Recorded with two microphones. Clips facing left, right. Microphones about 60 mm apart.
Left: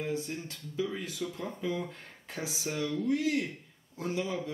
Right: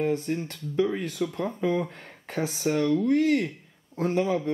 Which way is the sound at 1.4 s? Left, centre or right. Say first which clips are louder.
Right 9 dB; right.